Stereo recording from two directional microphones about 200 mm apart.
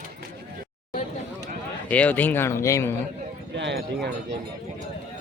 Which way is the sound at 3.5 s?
60° right (ahead or behind).